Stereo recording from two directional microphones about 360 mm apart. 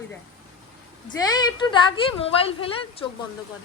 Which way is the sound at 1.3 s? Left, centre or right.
Centre.